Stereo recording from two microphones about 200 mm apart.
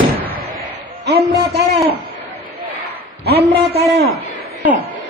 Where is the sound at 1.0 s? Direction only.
55° right (ahead or behind).